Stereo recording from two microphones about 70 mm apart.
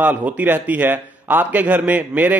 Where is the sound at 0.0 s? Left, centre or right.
Right.